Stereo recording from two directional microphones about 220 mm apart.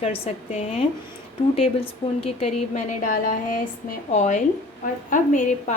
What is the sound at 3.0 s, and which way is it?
A woman's voice, 40° left (ahead or behind).